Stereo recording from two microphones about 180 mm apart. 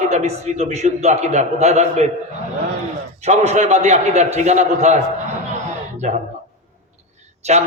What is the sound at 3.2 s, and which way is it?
A man's voice, 40° right (ahead or behind).